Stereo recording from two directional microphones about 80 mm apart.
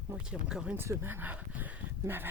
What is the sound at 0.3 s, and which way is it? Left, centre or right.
Speech, centre.